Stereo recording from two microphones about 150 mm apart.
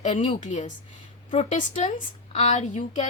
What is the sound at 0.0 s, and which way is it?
Speech, 45° left (ahead or behind).